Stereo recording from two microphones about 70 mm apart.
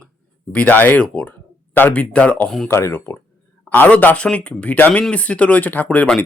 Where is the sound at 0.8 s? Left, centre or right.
Left.